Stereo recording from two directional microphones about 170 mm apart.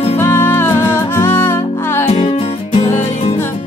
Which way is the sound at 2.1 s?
40° left (ahead or behind).